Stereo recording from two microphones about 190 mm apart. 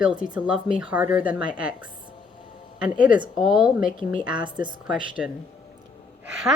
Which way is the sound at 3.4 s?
5° right (ahead or behind).